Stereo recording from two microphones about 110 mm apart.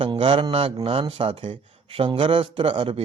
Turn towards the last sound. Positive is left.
turn(degrees=-50)  # may be behind; listen again after turning